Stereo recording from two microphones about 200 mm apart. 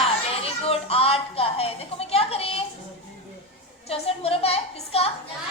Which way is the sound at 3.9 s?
30° left (ahead or behind).